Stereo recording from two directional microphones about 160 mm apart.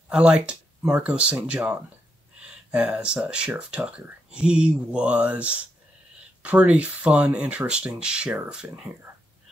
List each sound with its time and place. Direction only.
0.1 s speech: 5° right (ahead or behind)